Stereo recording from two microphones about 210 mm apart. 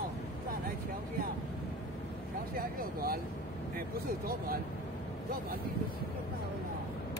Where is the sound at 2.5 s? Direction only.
45° right (ahead or behind).